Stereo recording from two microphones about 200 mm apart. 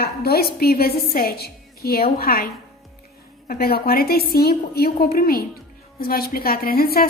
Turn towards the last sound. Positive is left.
turn(degrees=50)  # may be behind; listen again after turning